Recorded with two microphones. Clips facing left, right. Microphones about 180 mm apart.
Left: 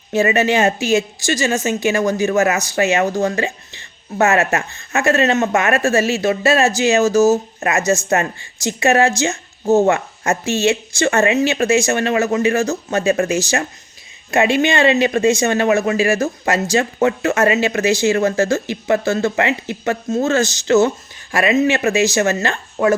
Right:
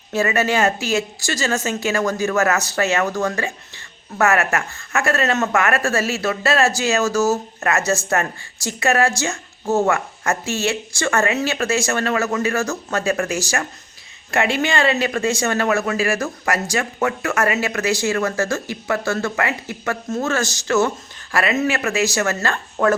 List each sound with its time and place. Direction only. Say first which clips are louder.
0.1 s a woman's voice: left 4 dB; 20° left (ahead or behind)